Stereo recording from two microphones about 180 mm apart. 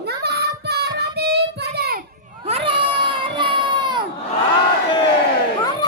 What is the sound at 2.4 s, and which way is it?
Crowd, 30° right (ahead or behind).